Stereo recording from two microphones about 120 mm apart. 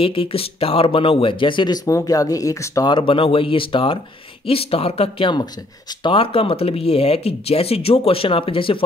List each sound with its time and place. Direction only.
0.0 s speech: 50° left (ahead or behind)
1.9 s speech: 30° left (ahead or behind)
2.9 s speech: 45° left (ahead or behind)
6.1 s speech: 50° left (ahead or behind)